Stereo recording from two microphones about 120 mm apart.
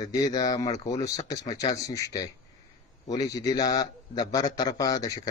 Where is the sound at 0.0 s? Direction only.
30° left (ahead or behind).